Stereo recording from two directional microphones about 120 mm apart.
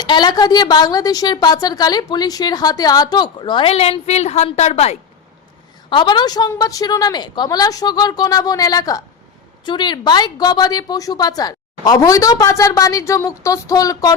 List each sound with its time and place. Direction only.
0.0 s a woman's voice: 40° left (ahead or behind); by 4.9 s 65° left (ahead or behind)
5.9 s a woman's voice: 40° left (ahead or behind)